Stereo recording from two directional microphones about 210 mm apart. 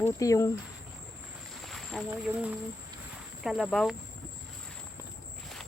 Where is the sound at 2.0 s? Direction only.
5° right (ahead or behind).